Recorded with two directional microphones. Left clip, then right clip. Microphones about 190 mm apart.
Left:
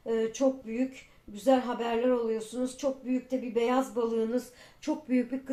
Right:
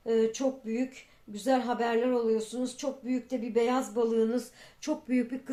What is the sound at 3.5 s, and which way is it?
Speech, 40° right (ahead or behind).